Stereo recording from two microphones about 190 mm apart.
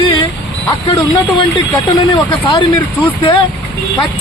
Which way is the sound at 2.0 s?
25° left (ahead or behind).